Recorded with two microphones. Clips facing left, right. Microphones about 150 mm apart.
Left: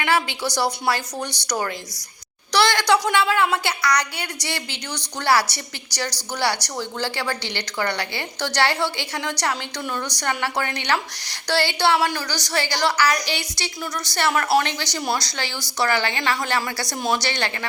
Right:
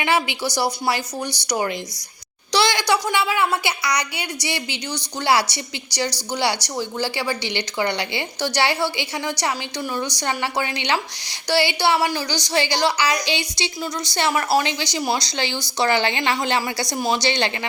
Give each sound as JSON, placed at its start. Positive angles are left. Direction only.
{"t": 0.0, "sound": "a woman's voice", "side_deg": -15}